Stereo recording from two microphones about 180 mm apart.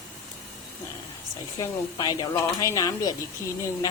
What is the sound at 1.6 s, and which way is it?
Speech, 20° left (ahead or behind).